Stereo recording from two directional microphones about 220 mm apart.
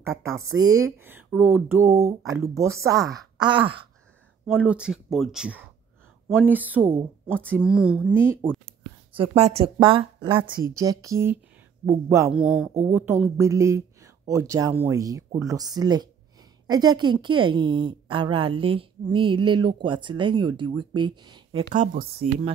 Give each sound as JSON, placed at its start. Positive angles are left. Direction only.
{"t": 0.3, "sound": "a woman's voice", "side_deg": -70}
{"t": 0.7, "sound": "speech", "side_deg": -10}
{"t": 4.5, "sound": "speech", "side_deg": -5}
{"t": 8.6, "sound": "a woman's voice", "side_deg": -25}
{"t": 21.7, "sound": "speech", "side_deg": -30}